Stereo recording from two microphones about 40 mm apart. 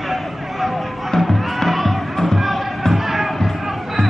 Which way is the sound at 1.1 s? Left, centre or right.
Centre.